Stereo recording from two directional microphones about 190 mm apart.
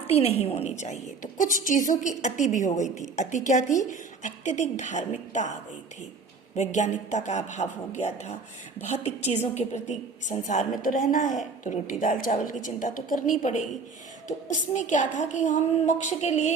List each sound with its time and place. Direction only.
0.1 s a woman's voice: 35° left (ahead or behind)
6.6 s a woman's voice: 40° left (ahead or behind)